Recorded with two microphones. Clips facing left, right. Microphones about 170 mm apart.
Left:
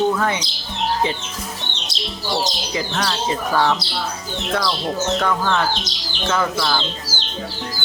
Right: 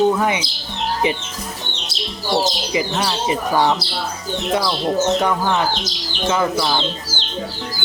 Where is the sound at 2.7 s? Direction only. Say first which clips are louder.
Right 2 dB; 10° right (ahead or behind).